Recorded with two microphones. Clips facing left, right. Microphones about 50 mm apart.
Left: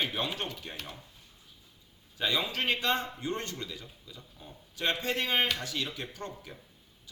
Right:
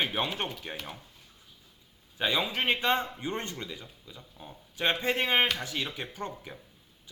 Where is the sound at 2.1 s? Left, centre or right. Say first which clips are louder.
Right 2 dB; right.